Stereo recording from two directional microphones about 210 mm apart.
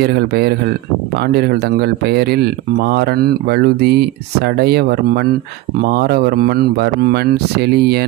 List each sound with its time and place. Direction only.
0.0 s speech: 50° right (ahead or behind)